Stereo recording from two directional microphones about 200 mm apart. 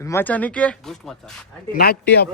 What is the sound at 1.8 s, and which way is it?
Speech, 55° left (ahead or behind).